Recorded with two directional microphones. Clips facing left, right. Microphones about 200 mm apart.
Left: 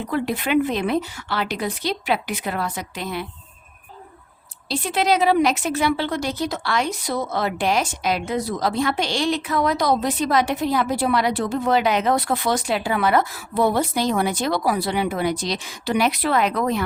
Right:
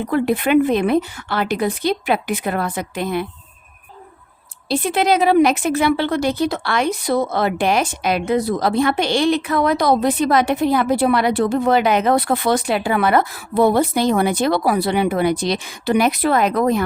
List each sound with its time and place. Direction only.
0.1 s a woman's voice: 55° right (ahead or behind)
4.7 s a woman's voice: 55° right (ahead or behind)